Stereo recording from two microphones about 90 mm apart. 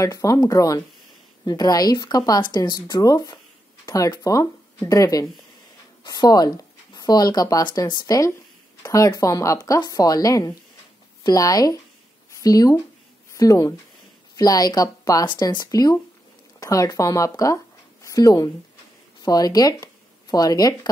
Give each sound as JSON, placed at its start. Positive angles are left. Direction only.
{"t": 0.0, "sound": "speech", "side_deg": 35}
{"t": 8.8, "sound": "a woman's voice", "side_deg": 40}